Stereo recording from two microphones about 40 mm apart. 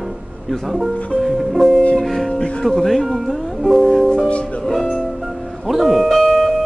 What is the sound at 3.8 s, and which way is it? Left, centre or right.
Music, centre.